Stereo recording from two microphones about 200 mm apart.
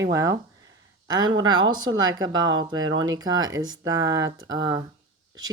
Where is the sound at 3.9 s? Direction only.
15° right (ahead or behind).